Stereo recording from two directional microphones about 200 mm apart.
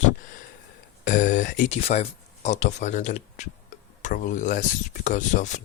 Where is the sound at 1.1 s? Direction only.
40° left (ahead or behind).